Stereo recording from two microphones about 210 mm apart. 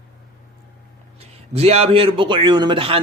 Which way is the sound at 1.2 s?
30° right (ahead or behind).